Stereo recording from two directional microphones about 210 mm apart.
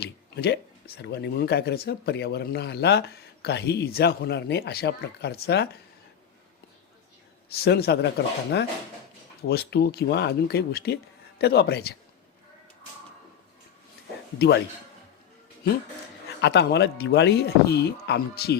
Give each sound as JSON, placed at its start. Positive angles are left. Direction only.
{"t": 0.0, "sound": "speech", "side_deg": 50}
{"t": 7.5, "sound": "speech", "side_deg": 50}
{"t": 9.5, "sound": "speech", "side_deg": 50}
{"t": 14.3, "sound": "speech", "side_deg": 55}
{"t": 16.4, "sound": "speech", "side_deg": 55}